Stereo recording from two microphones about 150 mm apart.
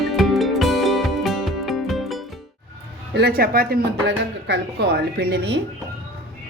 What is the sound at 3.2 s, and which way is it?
Speech, 80° right.